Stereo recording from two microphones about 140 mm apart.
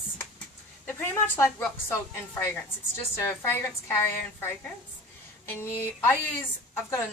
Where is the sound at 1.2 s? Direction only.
15° left (ahead or behind).